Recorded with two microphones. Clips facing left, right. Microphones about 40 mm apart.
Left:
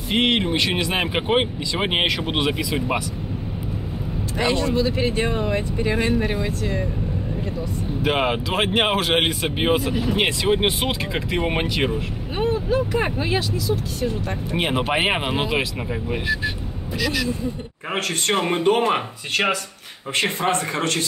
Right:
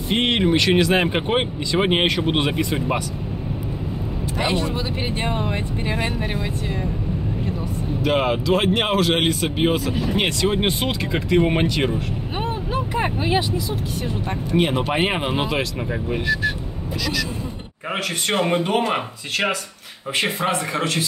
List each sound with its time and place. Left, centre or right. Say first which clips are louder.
0.1 s speech: right 1 dB; centre
4.4 s speech: left 3 dB; centre
8.0 s speech: right 1 dB; centre
12.4 s vehicle: left 5 dB; right
14.5 s speech: right 2 dB; centre
17.9 s speech: even; centre
20.2 s speech: even; centre